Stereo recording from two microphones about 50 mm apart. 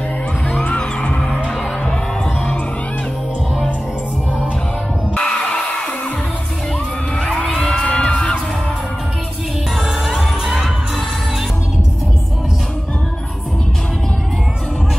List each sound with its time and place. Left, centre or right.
0.7 s music: left
5.2 s music: centre
7.3 s music: centre
9.8 s music: centre